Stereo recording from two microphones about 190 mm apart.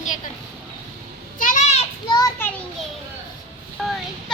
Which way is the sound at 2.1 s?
20° left (ahead or behind).